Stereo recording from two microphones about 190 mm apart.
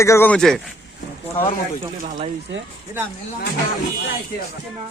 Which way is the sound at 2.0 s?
40° right (ahead or behind).